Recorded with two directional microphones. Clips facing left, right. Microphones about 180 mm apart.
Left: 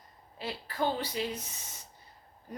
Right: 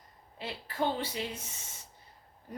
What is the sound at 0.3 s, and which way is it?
Speech, 25° right (ahead or behind).